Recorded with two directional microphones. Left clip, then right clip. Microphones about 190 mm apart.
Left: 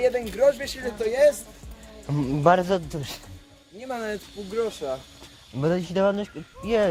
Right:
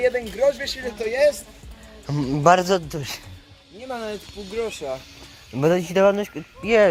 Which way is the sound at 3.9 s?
10° left (ahead or behind).